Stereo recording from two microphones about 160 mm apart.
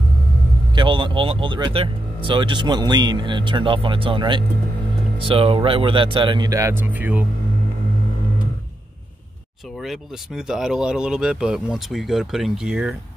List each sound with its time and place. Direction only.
0.7 s speech: 30° right (ahead or behind); by 7.2 s 10° right (ahead or behind)
9.8 s speech: 5° right (ahead or behind)